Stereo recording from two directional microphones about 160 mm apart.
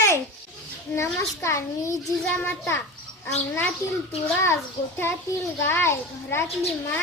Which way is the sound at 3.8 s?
20° left (ahead or behind).